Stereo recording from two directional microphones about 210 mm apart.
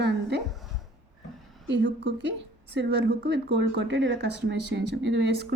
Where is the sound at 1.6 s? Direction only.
60° right (ahead or behind).